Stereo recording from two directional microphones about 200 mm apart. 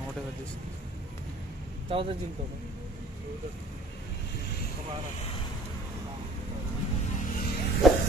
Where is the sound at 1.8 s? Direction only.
25° right (ahead or behind).